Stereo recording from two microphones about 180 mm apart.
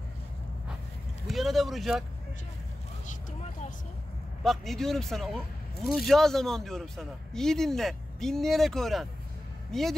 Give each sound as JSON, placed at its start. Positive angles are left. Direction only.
{"t": 1.2, "sound": "speech", "side_deg": 0}
{"t": 3.1, "sound": "vehicle", "side_deg": 40}
{"t": 4.4, "sound": "speech", "side_deg": 0}